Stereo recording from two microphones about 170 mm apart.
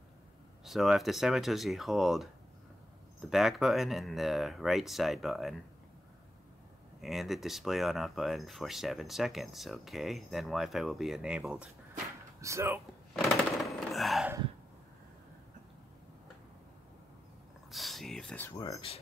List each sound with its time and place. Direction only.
0.7 s speech: centre (ahead or behind)
7.0 s speech: centre (ahead or behind)
12.4 s speech: 15° right (ahead or behind)
13.1 s a sound: centre (ahead or behind)
17.6 s speech: centre (ahead or behind); by 18.8 s 20° left (ahead or behind)